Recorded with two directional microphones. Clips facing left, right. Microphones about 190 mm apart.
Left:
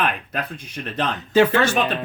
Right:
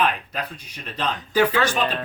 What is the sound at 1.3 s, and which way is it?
Speech, 25° left (ahead or behind).